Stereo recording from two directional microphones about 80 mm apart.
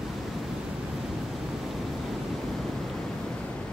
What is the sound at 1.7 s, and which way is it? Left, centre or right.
Waves, centre.